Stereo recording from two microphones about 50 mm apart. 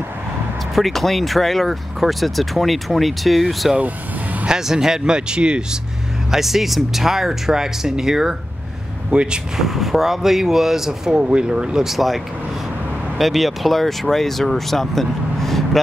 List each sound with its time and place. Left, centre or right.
0.7 s speech: centre
3.7 s vehicle: right
4.5 s speech: centre
6.3 s speech: centre
9.1 s speech: right
9.6 s speech: centre
11.1 s speech: centre
13.2 s speech: centre